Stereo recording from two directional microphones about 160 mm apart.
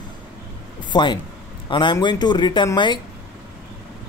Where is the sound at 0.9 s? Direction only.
30° left (ahead or behind).